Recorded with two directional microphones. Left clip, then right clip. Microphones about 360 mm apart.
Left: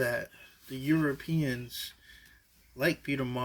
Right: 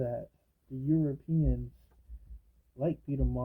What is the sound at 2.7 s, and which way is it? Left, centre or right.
Speech, left.